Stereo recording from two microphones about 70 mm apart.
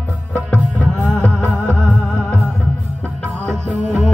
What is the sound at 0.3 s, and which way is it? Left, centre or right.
Music, centre.